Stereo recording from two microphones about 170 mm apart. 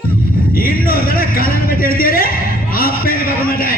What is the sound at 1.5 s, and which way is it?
A man's voice, 60° left (ahead or behind).